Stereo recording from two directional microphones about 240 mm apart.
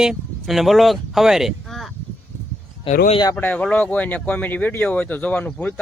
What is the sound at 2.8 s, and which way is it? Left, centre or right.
Speech, left.